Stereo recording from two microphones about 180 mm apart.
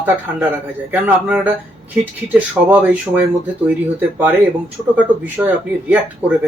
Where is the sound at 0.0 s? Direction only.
10° right (ahead or behind).